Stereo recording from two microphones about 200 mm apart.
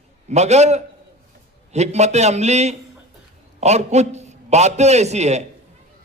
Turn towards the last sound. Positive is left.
turn(degrees=-35)  # may be behind; listen again after turning